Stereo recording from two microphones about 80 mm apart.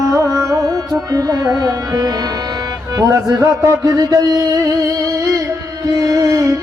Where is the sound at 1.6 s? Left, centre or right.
Right.